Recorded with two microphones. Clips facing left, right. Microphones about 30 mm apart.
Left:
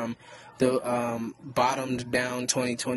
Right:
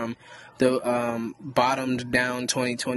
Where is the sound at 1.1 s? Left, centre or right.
Right.